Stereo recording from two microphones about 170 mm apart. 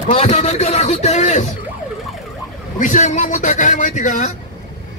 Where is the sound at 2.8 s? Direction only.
45° left (ahead or behind).